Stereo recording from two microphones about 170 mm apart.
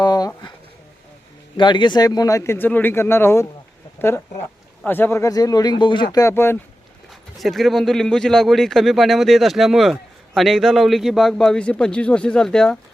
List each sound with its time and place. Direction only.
0.0 s a sound: 20° left (ahead or behind)
1.5 s speech: 25° left (ahead or behind)
4.8 s speech: 10° left (ahead or behind)
7.3 s speech: centre (ahead or behind)